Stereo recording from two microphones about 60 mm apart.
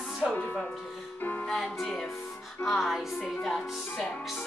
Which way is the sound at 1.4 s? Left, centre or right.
Centre.